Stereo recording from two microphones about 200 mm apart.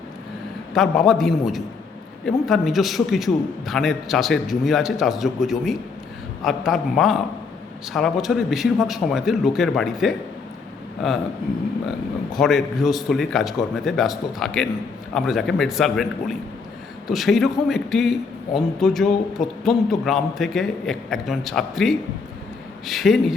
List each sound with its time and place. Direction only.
0.7 s a man's voice: centre (ahead or behind)
12.3 s a man's voice: centre (ahead or behind)